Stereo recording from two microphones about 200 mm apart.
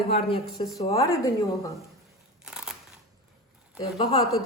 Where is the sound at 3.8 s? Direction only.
25° left (ahead or behind).